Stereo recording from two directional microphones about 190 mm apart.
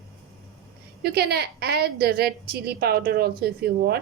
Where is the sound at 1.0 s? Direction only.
55° right (ahead or behind).